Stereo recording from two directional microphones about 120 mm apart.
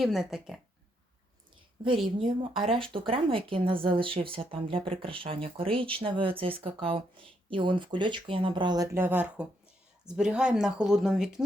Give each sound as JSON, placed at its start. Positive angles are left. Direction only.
{"t": 0.0, "sound": "speech", "side_deg": 0}
{"t": 2.1, "sound": "speech", "side_deg": -50}
{"t": 9.0, "sound": "speech", "side_deg": -15}